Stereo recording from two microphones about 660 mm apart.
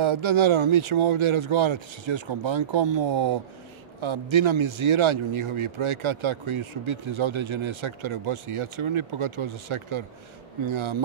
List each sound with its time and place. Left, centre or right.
0.0 s speech: right